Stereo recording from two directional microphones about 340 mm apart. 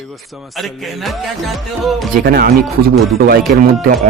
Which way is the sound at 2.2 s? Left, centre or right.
Right.